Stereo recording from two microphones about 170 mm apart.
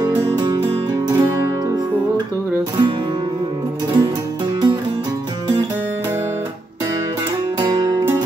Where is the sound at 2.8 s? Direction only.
25° right (ahead or behind).